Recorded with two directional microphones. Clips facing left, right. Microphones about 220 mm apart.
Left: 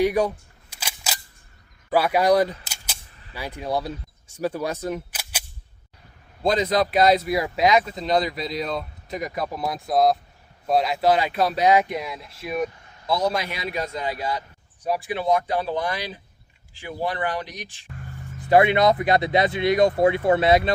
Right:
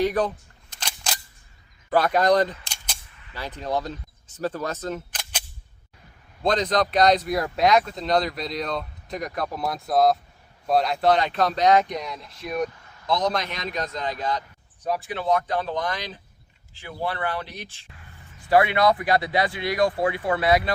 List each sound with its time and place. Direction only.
0.0 s single-lens reflex camera: 10° left (ahead or behind)
1.9 s speech: 10° left (ahead or behind)
6.4 s speech: 5° left (ahead or behind); by 20.7 s 25° left (ahead or behind)